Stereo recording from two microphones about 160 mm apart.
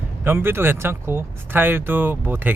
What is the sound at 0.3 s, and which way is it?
Speech, 15° right (ahead or behind).